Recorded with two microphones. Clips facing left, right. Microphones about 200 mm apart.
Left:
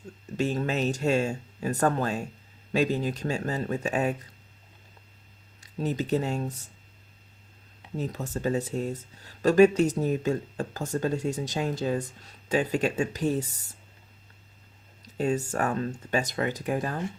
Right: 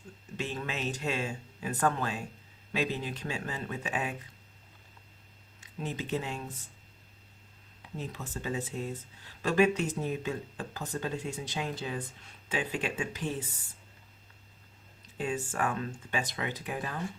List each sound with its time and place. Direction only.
0.3 s speech: 40° left (ahead or behind)
5.5 s speech: 40° left (ahead or behind)
7.9 s speech: 40° left (ahead or behind)
15.0 s speech: 40° left (ahead or behind)